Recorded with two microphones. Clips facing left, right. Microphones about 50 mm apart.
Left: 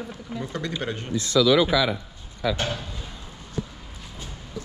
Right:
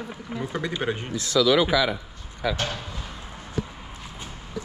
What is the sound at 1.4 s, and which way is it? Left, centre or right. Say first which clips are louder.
Speech: left 1 dB; right.